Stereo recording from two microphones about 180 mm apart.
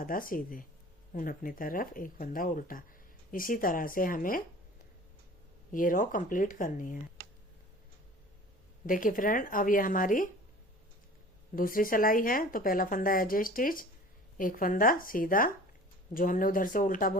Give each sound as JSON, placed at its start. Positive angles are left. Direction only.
{"t": 0.0, "sound": "speech", "side_deg": 50}
{"t": 5.7, "sound": "speech", "side_deg": 50}
{"t": 8.9, "sound": "speech", "side_deg": 50}
{"t": 11.5, "sound": "speech", "side_deg": 50}